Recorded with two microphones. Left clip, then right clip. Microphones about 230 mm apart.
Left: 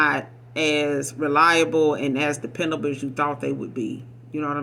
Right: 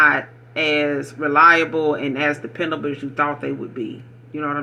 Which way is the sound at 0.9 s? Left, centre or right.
Left.